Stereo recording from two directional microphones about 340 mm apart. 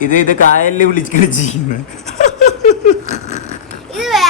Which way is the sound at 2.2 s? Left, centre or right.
Left.